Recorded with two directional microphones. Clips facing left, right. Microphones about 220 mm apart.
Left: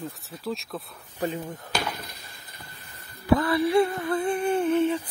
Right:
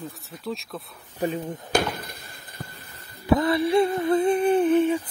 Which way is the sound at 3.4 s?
25° right (ahead or behind).